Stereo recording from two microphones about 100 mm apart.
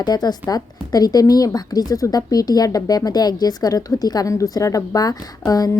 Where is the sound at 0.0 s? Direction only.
45° left (ahead or behind).